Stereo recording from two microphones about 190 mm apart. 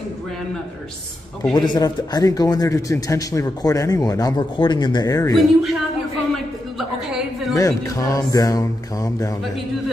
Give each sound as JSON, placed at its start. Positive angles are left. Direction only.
{"t": 1.5, "sound": "speech", "side_deg": 20}
{"t": 5.3, "sound": "a man's voice", "side_deg": 0}
{"t": 6.8, "sound": "a sound", "side_deg": 0}
{"t": 7.5, "sound": "speech", "side_deg": 20}